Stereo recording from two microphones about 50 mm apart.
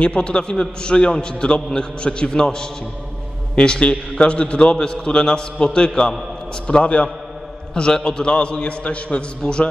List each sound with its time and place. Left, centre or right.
0.0 s a man's voice: left